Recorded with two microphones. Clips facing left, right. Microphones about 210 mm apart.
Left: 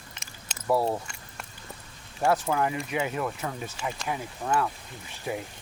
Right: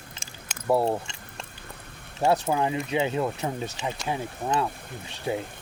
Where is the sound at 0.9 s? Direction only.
25° right (ahead or behind).